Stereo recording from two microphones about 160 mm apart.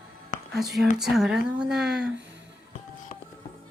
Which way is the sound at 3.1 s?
50° left (ahead or behind).